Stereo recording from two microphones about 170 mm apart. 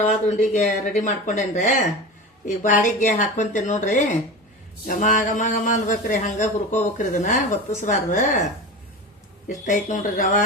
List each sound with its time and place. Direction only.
0.0 s a man's voice: 45° left (ahead or behind)
9.5 s a man's voice: 45° left (ahead or behind)